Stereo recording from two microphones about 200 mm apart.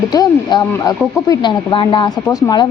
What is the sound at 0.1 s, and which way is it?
Speech, 20° left (ahead or behind).